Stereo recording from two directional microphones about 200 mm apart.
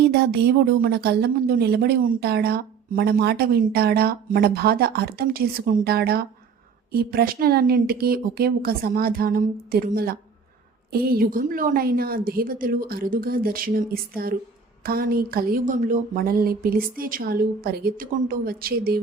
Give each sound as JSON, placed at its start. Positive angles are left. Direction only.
{"t": 0.1, "sound": "a woman's voice", "side_deg": -55}